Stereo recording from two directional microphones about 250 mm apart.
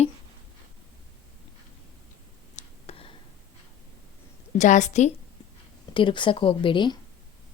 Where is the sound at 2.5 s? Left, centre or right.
Left.